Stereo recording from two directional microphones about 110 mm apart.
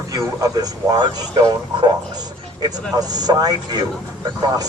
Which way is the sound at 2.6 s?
35° right (ahead or behind).